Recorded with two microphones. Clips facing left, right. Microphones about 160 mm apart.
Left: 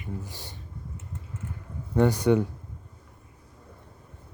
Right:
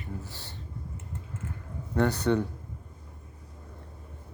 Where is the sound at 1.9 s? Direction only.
10° left (ahead or behind).